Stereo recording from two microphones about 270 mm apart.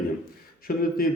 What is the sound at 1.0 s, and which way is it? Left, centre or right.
Speech, left.